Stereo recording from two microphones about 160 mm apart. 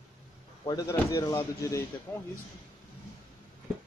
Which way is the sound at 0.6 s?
20° left (ahead or behind).